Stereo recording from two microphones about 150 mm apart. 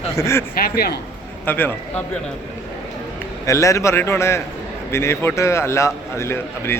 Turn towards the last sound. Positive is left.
turn(degrees=15)  # may be behind; listen again after turning